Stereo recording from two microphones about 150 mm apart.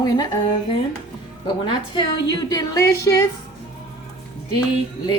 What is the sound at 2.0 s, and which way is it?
A woman's voice, 30° left (ahead or behind).